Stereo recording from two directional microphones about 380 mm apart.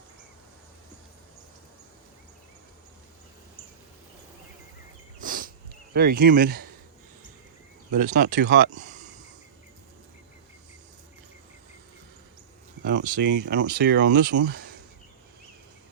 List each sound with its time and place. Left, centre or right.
5.2 s a sound: right
5.9 s speech: right
7.9 s speech: centre
12.8 s speech: right